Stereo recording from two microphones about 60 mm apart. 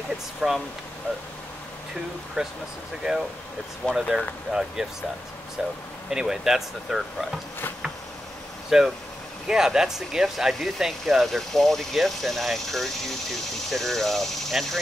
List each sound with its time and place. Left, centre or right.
0.4 s speech: centre
2.4 s speech: centre
3.8 s speech: centre
4.5 s speech: centre
8.6 s speech: centre